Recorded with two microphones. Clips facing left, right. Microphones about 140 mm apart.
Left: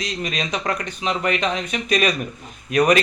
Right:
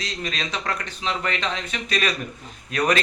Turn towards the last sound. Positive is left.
turn(degrees=15)  # may be behind; listen again after turning